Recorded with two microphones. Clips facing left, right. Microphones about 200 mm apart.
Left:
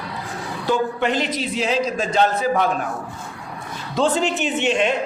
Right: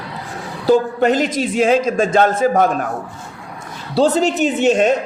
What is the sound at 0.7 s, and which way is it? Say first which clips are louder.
A man's voice: right 7 dB; 40° right (ahead or behind).